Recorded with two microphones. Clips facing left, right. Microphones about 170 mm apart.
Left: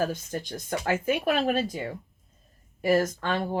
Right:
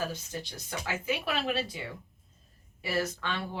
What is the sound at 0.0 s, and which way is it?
Speech, 50° left (ahead or behind).